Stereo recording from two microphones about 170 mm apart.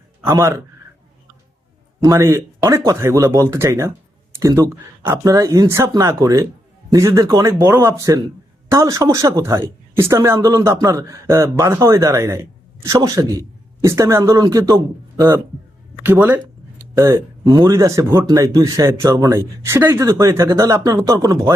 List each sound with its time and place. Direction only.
0.3 s speech: 20° right (ahead or behind)
2.0 s speech: 20° right (ahead or behind)
16.0 s speech: 10° right (ahead or behind)